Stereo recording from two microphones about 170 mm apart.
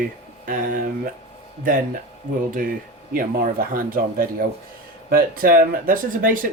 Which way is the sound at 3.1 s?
55° right (ahead or behind).